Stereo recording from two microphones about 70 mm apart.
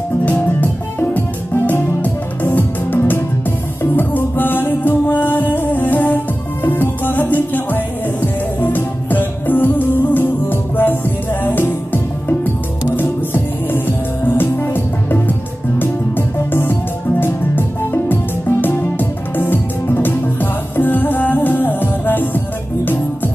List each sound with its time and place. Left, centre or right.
0.2 s music: left